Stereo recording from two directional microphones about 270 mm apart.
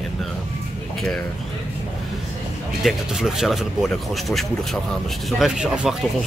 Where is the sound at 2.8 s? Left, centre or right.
Centre.